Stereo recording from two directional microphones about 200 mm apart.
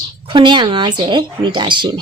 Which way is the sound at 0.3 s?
25° right (ahead or behind).